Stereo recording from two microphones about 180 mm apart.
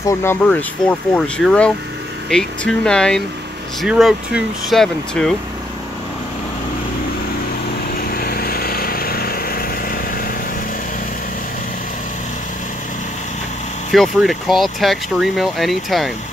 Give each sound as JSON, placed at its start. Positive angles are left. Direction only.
{"t": 0.0, "sound": "speech", "side_deg": 15}
{"t": 8.0, "sound": "vehicle", "side_deg": 55}
{"t": 13.9, "sound": "speech", "side_deg": 0}